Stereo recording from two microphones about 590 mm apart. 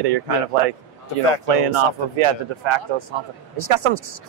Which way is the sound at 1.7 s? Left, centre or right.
Right.